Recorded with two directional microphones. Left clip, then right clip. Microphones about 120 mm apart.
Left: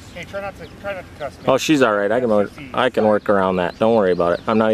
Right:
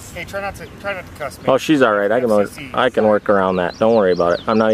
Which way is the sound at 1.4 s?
20° left (ahead or behind).